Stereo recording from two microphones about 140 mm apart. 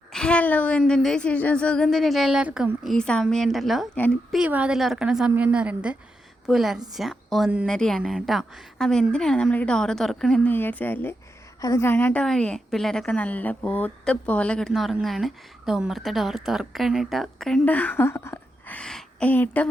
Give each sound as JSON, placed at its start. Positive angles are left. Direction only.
{"t": 0.1, "sound": "a woman's voice", "side_deg": 5}
{"t": 3.9, "sound": "a woman's voice", "side_deg": 10}
{"t": 4.3, "sound": "a woman's voice", "side_deg": -10}
{"t": 17.7, "sound": "speech", "side_deg": 10}
{"t": 18.8, "sound": "speech", "side_deg": 5}